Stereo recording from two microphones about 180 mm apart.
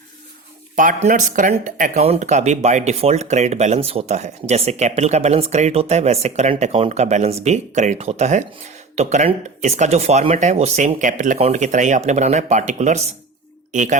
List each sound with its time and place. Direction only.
0.8 s speech: 45° right (ahead or behind)